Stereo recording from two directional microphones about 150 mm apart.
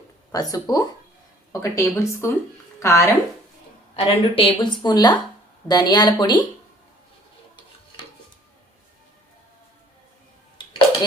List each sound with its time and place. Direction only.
0.3 s speech: 25° left (ahead or behind)
3.9 s speech: 40° left (ahead or behind)
10.6 s a sound: 30° left (ahead or behind)